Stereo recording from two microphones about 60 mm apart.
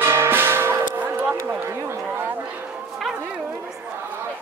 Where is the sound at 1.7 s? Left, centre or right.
Right.